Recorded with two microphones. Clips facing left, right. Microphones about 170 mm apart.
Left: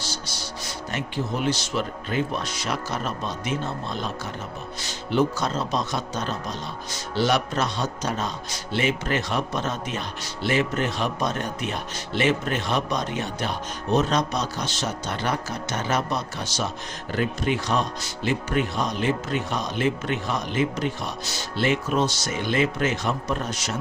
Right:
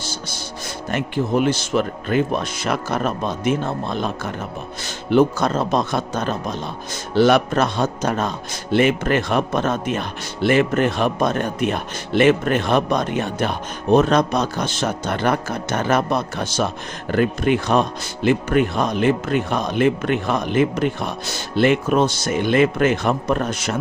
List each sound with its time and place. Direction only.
0.0 s music: 50° right (ahead or behind)
0.9 s speech: 55° right (ahead or behind)